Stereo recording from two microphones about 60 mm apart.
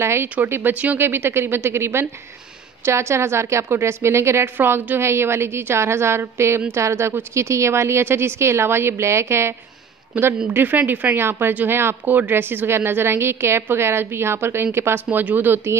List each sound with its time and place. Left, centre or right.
0.0 s a woman's voice: right
0.5 s speech: right
1.0 s a woman's voice: right
4.6 s a woman's voice: right
10.1 s speech: right
11.1 s a woman's voice: right
15.0 s speech: right